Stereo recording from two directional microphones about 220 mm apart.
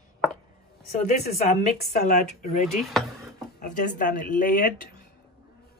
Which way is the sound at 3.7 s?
35° left (ahead or behind).